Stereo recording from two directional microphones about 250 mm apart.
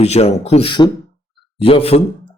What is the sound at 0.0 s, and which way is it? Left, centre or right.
Speech, left.